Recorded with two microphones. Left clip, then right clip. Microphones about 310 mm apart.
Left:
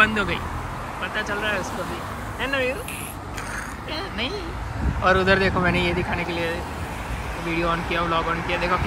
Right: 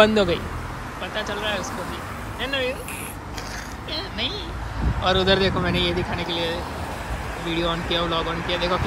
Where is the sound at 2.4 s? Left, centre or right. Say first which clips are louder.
Left 1 dB; right.